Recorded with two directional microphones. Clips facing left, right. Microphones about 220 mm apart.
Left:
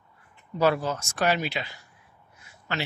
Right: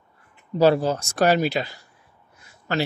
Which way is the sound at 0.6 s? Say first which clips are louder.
Right 6 dB; 30° right (ahead or behind).